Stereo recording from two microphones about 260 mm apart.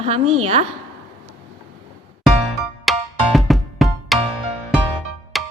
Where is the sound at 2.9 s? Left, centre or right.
Centre.